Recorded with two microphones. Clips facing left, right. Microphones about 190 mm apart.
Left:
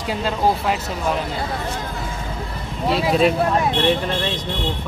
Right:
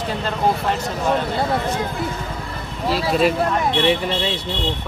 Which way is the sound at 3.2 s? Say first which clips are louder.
Even; centre (ahead or behind).